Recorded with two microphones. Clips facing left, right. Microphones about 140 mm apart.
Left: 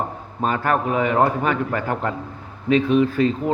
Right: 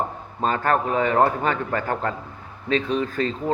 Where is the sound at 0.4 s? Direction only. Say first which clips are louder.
Left 1 dB; 10° left (ahead or behind).